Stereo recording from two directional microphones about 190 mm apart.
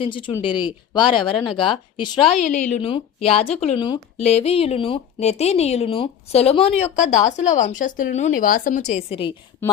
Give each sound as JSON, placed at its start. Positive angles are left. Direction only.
{"t": 0.0, "sound": "speech", "side_deg": 25}